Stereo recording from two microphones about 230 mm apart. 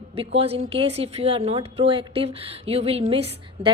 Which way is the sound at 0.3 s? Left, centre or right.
Right.